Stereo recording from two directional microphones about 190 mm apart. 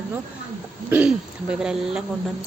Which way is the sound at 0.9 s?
5° right (ahead or behind).